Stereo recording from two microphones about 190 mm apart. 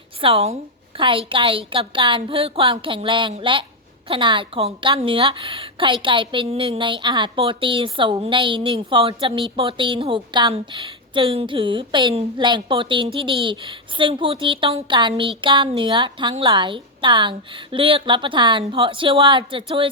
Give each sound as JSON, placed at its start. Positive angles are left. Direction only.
{"t": 0.2, "sound": "a woman's voice", "side_deg": -30}